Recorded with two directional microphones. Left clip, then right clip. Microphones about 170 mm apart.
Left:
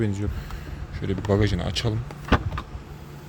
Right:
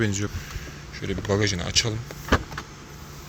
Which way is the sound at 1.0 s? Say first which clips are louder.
Left 1 dB; 25° left (ahead or behind).